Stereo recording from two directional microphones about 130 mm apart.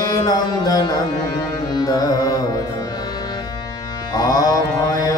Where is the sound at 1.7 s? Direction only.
30° left (ahead or behind).